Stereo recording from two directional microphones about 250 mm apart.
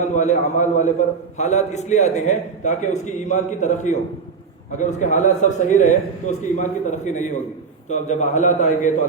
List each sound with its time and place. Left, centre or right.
0.2 s a man's voice: left